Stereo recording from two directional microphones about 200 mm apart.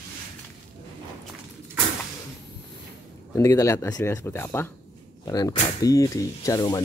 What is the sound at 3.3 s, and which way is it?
Speech, 15° left (ahead or behind).